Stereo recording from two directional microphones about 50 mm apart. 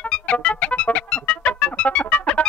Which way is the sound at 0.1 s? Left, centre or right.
Left.